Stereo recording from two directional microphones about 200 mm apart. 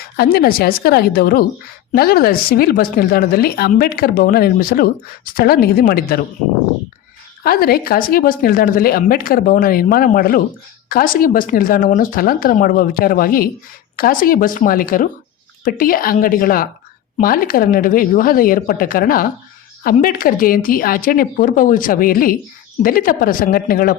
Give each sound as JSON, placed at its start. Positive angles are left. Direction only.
{"t": 0.2, "sound": "speech", "side_deg": 50}
{"t": 7.4, "sound": "speech", "side_deg": 50}